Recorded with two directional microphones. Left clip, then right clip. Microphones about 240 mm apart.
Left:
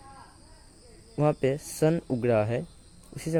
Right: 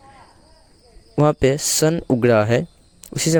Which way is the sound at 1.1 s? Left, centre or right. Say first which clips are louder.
Right 9 dB; right.